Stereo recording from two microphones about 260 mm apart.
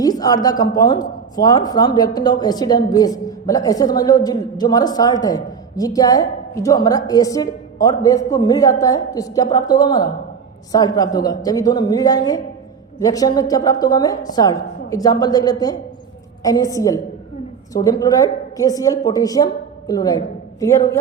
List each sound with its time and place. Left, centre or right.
0.0 s a woman's voice: centre